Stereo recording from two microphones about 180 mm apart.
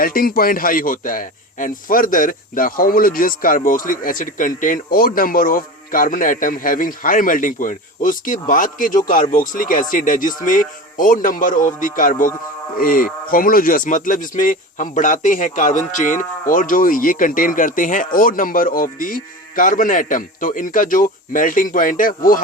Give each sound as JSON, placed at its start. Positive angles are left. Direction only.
{"t": 0.0, "sound": "speech", "side_deg": 50}